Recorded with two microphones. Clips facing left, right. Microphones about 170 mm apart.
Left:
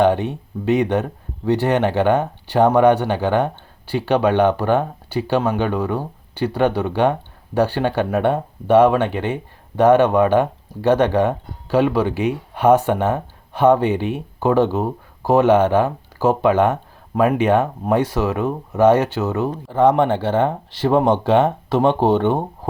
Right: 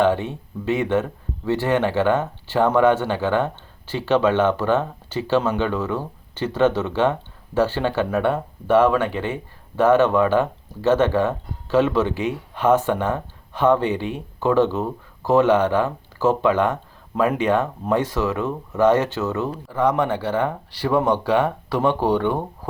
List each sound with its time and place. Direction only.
0.0 s speech: 15° left (ahead or behind)
19.5 s speech: 30° left (ahead or behind)